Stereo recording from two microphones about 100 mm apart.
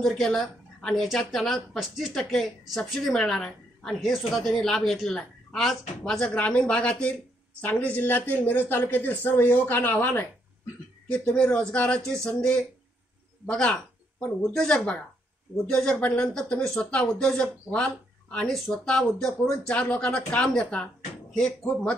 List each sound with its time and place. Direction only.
0.0 s a woman's voice: 5° left (ahead or behind)